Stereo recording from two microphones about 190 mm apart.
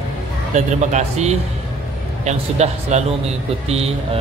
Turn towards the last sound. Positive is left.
turn(degrees=-30)  # may be behind; listen again after turning